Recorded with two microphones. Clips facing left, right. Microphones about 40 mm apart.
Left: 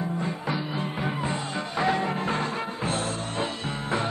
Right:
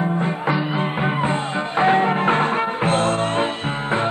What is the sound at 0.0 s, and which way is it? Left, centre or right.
Music, right.